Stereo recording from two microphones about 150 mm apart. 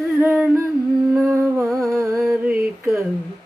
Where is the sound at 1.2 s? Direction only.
20° right (ahead or behind).